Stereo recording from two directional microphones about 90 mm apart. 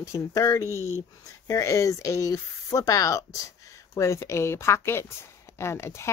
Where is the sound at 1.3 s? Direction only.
35° left (ahead or behind).